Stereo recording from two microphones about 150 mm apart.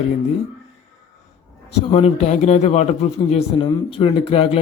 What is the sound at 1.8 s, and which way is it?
A man's voice, 40° left (ahead or behind).